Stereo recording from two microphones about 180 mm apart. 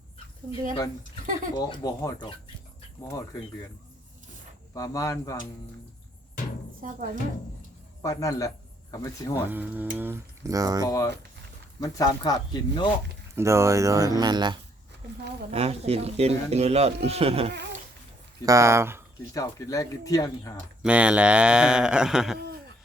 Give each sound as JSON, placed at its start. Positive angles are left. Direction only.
{"t": 1.5, "sound": "speech", "side_deg": 20}
{"t": 4.7, "sound": "speech", "side_deg": 20}
{"t": 8.0, "sound": "a man's voice", "side_deg": 15}
{"t": 9.5, "sound": "speech", "side_deg": -10}
{"t": 10.8, "sound": "speech", "side_deg": 15}
{"t": 13.3, "sound": "speech", "side_deg": -15}
{"t": 15.5, "sound": "speech", "side_deg": -35}
{"t": 18.4, "sound": "speech", "side_deg": -15}
{"t": 19.3, "sound": "speech", "side_deg": 20}
{"t": 20.8, "sound": "speech", "side_deg": -5}